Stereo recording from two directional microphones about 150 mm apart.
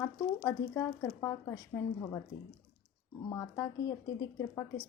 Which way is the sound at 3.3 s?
20° left (ahead or behind).